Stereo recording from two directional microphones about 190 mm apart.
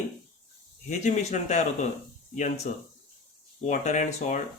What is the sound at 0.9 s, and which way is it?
Speech, 40° left (ahead or behind).